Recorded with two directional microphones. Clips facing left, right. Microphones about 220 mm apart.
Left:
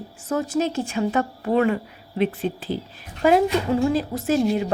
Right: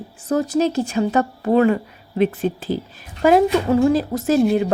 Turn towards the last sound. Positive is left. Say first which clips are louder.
# right 4 dB
turn(degrees=-40)  # may be behind; listen again after turning